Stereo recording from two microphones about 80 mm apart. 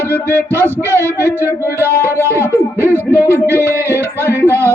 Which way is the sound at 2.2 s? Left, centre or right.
Right.